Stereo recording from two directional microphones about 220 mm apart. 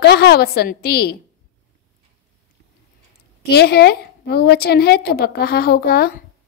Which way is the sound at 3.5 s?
50° left (ahead or behind).